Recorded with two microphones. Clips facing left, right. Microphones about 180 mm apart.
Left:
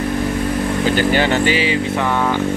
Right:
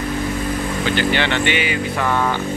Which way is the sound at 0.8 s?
40° left (ahead or behind).